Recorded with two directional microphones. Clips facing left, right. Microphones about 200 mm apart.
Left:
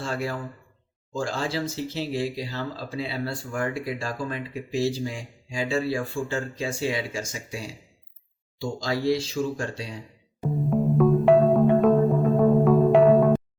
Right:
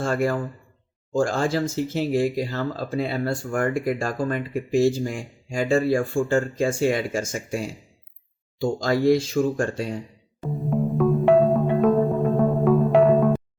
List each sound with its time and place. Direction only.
0.0 s speech: 50° right (ahead or behind)
10.5 s music: centre (ahead or behind)